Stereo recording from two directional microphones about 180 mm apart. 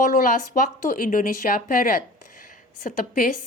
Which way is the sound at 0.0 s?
50° left (ahead or behind).